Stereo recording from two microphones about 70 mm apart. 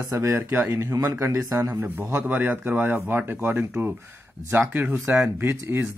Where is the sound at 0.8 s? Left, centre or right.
Right.